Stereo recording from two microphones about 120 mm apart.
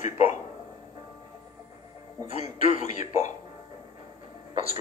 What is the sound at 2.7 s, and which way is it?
Speech, 90° left.